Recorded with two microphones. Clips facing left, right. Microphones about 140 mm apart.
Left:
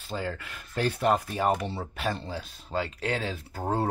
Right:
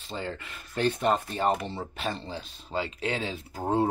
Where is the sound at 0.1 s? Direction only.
5° left (ahead or behind).